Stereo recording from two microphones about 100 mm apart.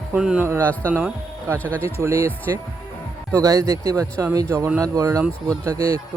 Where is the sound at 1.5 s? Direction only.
15° left (ahead or behind).